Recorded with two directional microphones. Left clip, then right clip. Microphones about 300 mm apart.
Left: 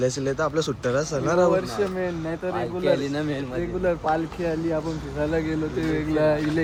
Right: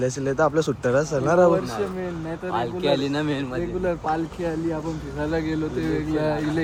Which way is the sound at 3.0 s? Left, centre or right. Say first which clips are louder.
Right 2 dB; centre.